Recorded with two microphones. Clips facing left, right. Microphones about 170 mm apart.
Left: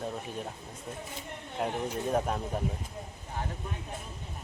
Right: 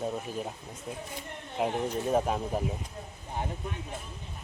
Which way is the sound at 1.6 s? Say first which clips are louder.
Right 3 dB; 5° right (ahead or behind).